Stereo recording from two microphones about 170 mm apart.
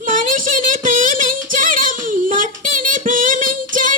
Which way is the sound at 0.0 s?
50° right (ahead or behind).